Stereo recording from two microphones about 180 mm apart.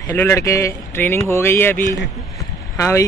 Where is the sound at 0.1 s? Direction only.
15° left (ahead or behind).